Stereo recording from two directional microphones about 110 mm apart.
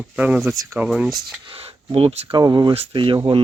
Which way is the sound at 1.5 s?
60° right (ahead or behind).